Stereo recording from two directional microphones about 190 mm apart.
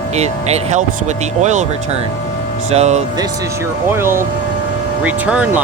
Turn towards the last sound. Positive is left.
turn(degrees=-5)  # may be behind; listen again after turning